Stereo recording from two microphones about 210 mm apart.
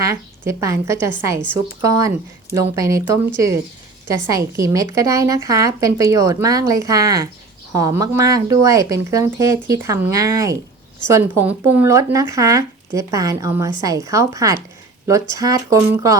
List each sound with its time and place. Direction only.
0.1 s speech: 15° right (ahead or behind)